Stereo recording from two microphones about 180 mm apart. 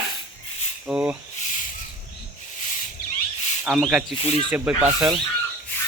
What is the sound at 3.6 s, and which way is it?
Speech, 5° right (ahead or behind).